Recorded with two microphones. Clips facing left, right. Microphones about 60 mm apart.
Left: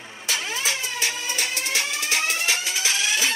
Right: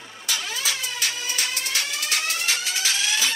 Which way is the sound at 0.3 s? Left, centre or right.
Left.